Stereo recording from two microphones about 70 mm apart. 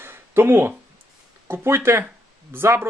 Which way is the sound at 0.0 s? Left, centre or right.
Right.